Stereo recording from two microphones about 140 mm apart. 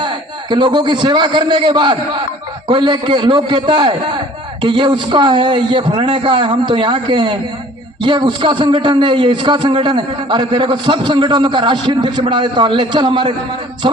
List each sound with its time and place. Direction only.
0.5 s a man's voice: 35° right (ahead or behind)